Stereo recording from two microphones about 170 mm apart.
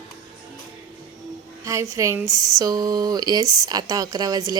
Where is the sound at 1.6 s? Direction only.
20° right (ahead or behind).